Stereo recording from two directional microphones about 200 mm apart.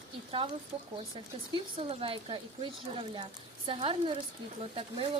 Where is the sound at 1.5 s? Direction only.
30° right (ahead or behind).